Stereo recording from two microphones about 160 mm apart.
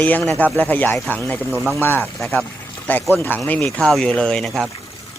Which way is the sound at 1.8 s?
10° left (ahead or behind).